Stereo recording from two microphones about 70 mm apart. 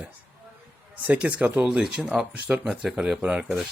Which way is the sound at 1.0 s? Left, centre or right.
Right.